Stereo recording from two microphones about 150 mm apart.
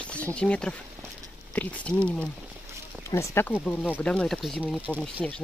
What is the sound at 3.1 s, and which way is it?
Speech, 20° left (ahead or behind).